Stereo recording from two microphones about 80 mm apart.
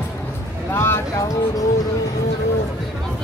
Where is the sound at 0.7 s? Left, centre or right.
Left.